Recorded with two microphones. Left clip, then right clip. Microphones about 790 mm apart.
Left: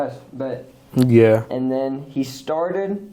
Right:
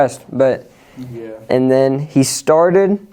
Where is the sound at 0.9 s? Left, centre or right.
Left.